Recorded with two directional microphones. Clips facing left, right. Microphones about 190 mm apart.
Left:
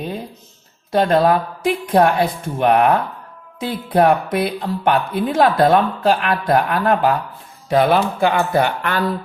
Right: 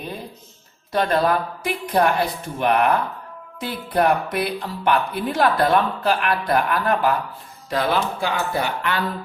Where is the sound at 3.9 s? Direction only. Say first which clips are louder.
Left 4 dB; 50° left (ahead or behind).